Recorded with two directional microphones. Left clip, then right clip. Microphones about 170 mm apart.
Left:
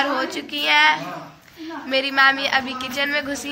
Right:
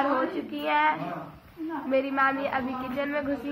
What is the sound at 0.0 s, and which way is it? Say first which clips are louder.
A woman's voice: left 4 dB; 15° left (ahead or behind).